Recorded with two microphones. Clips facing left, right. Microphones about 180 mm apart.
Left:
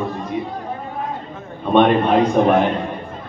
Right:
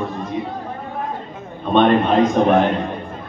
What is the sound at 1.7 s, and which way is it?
Speech, 10° left (ahead or behind).